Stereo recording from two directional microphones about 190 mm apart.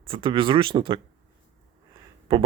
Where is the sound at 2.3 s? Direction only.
30° right (ahead or behind).